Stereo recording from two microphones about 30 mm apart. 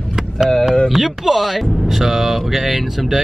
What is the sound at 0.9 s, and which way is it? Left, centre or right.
Speech, centre.